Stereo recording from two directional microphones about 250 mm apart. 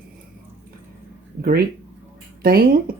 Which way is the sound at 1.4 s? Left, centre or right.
Right.